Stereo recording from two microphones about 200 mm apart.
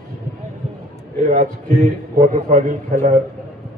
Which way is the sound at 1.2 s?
40° right (ahead or behind).